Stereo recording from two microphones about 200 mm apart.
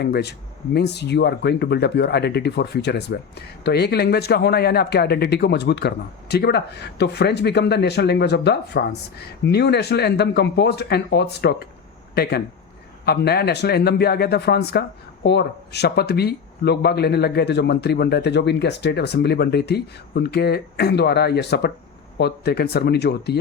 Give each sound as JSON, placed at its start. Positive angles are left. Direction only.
{"t": 0.0, "sound": "speech", "side_deg": 55}